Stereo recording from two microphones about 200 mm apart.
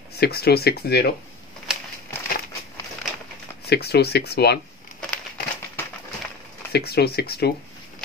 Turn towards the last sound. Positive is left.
turn(degrees=50)  # may be behind; listen again after turning